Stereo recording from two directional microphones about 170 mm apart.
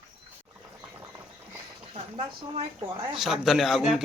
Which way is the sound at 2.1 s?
30° right (ahead or behind).